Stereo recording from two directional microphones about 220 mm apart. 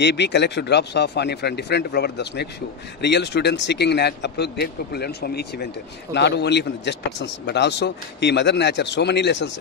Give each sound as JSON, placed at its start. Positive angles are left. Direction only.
{"t": 0.0, "sound": "speech", "side_deg": 50}